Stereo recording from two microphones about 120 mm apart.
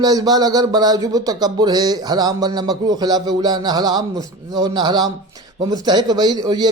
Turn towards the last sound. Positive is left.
turn(degrees=-35)  # may be behind; listen again after turning